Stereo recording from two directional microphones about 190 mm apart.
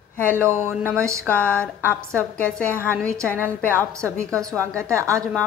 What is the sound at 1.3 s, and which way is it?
A woman's voice, 5° left (ahead or behind).